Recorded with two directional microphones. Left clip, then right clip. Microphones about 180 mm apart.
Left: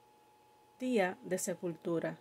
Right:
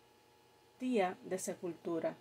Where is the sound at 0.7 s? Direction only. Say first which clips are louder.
Left 2 dB; 35° left (ahead or behind).